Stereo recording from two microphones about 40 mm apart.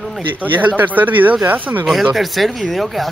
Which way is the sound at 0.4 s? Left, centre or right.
Right.